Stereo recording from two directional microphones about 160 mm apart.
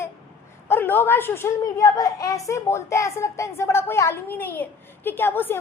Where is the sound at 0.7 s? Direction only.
15° left (ahead or behind).